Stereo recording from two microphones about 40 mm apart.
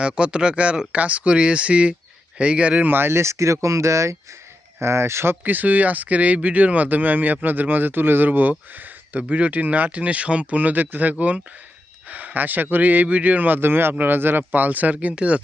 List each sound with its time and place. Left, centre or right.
0.0 s speech: right
2.8 s speech: right
5.1 s speech: right
5.4 s speech: right
11.1 s speech: right
13.6 s speech: right
14.0 s speech: right
15.1 s speech: right